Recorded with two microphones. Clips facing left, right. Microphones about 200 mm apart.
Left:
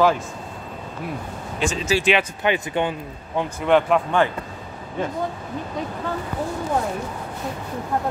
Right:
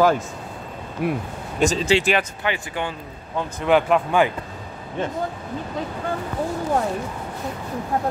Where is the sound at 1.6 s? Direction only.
40° right (ahead or behind).